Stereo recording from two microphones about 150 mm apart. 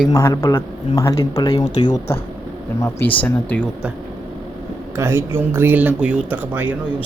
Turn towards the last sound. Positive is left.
turn(degrees=-10)  # may be behind; listen again after turning